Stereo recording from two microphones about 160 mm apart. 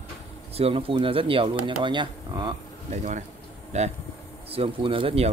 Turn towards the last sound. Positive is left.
turn(degrees=-35)  # may be behind; listen again after turning